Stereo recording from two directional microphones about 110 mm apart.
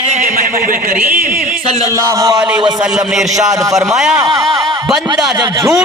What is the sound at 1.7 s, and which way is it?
Speech, 35° left (ahead or behind).